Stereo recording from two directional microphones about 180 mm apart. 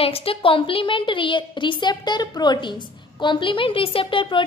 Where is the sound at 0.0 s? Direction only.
30° left (ahead or behind).